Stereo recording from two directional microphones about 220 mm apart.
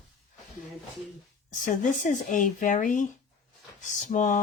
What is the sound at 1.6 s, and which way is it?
Speech, 35° left (ahead or behind).